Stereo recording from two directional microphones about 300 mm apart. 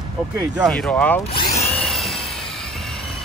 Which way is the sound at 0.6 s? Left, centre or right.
Centre.